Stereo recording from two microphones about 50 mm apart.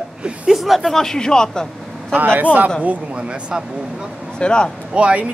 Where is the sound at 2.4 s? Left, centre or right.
Right.